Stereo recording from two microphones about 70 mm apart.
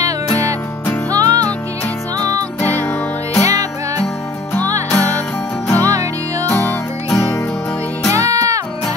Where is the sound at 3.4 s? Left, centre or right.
Right.